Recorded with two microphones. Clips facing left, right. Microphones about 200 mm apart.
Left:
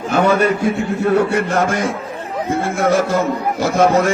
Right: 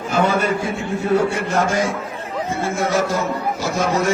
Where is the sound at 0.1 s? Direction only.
60° left (ahead or behind).